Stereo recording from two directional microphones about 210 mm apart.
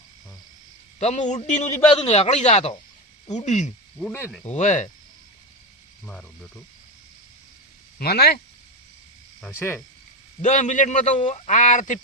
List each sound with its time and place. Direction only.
0.9 s a man's voice: 30° left (ahead or behind)
3.9 s speech: 5° left (ahead or behind)
4.4 s a man's voice: 35° left (ahead or behind)
6.1 s speech: 5° left (ahead or behind)
7.9 s speech: 50° left (ahead or behind)
9.5 s speech: 10° left (ahead or behind)
10.4 s a man's voice: 35° left (ahead or behind)